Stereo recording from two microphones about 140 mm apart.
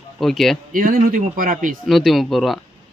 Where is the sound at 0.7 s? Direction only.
75° right (ahead or behind).